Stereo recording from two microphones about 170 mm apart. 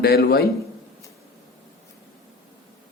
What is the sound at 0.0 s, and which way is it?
Speech, 65° left (ahead or behind).